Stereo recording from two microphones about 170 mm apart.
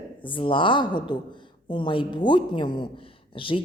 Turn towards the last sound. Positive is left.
turn(degrees=30)  # may be behind; listen again after turning